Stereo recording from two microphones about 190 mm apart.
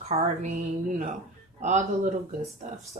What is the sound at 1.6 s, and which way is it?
Speech, 40° right (ahead or behind).